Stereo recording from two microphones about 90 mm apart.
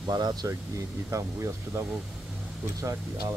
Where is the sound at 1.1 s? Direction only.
35° right (ahead or behind).